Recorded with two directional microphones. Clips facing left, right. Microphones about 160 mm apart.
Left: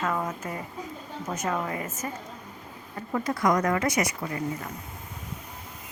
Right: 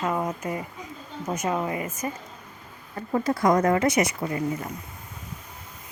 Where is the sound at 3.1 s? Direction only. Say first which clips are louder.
Right 3 dB; 30° right (ahead or behind).